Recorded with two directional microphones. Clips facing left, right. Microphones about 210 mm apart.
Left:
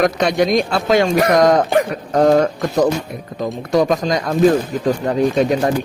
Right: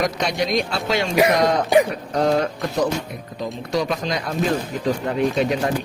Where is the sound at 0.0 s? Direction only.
55° left (ahead or behind).